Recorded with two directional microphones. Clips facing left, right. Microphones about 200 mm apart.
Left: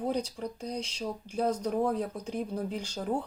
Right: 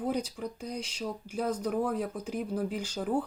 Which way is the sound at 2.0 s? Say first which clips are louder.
Even; 5° right (ahead or behind).